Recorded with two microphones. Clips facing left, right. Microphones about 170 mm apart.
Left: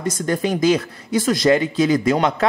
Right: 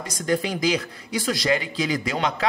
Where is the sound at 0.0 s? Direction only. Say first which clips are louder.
Left 4 dB; 50° left (ahead or behind).